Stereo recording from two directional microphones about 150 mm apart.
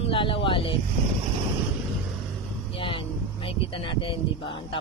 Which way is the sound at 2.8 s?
35° left (ahead or behind).